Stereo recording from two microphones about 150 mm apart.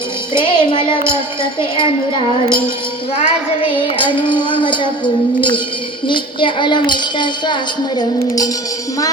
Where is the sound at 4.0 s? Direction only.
30° left (ahead or behind).